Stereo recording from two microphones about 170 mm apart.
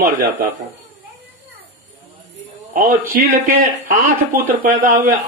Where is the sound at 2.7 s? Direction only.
55° right (ahead or behind).